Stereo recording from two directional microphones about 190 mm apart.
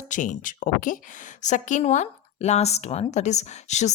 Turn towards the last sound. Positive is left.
turn(degrees=35)  # may be behind; listen again after turning